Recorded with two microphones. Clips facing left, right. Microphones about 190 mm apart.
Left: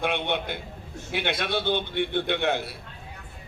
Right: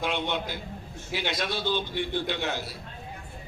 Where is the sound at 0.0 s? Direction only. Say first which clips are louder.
Left 2 dB; 60° left (ahead or behind).